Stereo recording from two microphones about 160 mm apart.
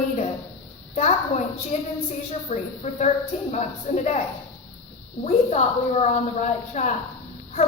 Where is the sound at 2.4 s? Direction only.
45° left (ahead or behind).